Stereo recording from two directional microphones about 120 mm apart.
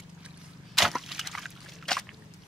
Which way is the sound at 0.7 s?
Centre (ahead or behind).